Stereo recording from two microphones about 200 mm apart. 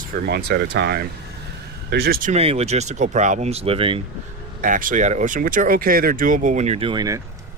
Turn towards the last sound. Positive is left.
turn(degrees=-20)  # may be behind; listen again after turning